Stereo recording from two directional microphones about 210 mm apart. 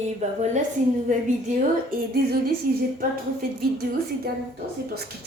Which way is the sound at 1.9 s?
45° right (ahead or behind).